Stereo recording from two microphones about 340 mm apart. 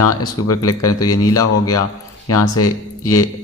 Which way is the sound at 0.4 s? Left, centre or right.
Left.